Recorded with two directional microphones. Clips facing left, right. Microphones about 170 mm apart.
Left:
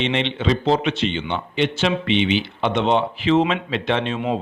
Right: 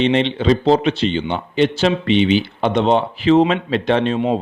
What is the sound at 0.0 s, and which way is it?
A man's voice, 35° right (ahead or behind).